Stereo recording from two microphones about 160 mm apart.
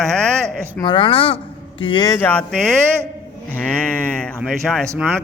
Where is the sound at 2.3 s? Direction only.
10° left (ahead or behind).